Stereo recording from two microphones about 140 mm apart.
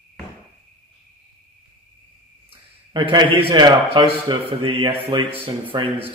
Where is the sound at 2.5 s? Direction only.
35° right (ahead or behind).